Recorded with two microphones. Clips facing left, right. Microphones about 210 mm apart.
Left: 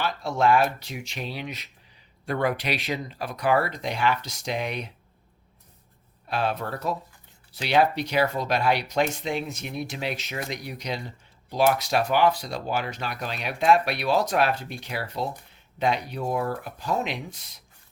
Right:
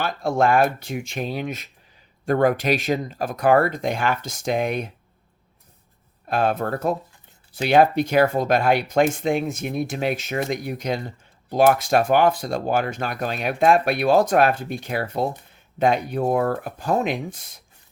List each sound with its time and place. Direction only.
0.0 s speech: 50° right (ahead or behind)
6.2 s speech: 50° right (ahead or behind)